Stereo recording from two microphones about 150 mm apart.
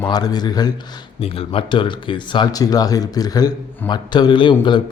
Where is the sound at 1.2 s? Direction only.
40° left (ahead or behind).